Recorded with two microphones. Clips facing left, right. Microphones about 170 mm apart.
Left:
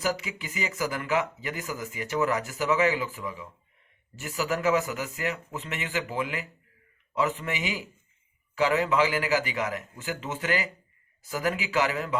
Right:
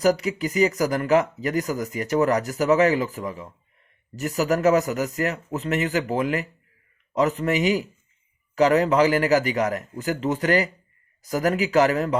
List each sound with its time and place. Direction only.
0.0 s speech: 40° right (ahead or behind)